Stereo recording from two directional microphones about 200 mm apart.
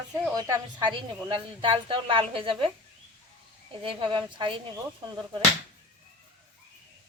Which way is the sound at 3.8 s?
25° right (ahead or behind).